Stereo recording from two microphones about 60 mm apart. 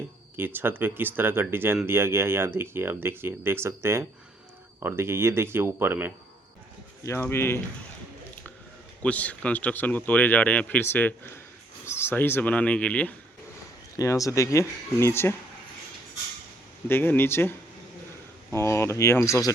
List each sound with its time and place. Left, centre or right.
0.3 s speech: right
7.2 s speech: left
9.0 s speech: left
10.8 s speech: left
11.9 s a sound: left
12.1 s speech: left
12.5 s speech: left
13.9 s speech: left
16.9 s speech: left
18.5 s speech: left